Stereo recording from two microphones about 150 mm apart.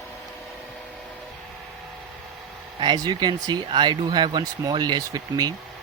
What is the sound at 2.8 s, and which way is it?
Speech, 30° right (ahead or behind).